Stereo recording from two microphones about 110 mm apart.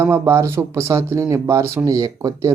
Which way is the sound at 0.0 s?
25° right (ahead or behind).